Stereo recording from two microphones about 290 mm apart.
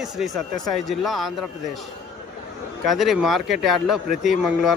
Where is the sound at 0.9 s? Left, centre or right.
Centre.